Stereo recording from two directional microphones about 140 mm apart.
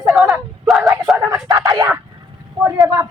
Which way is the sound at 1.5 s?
25° right (ahead or behind).